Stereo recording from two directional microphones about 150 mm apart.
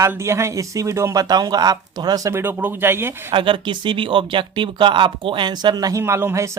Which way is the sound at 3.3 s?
35° right (ahead or behind).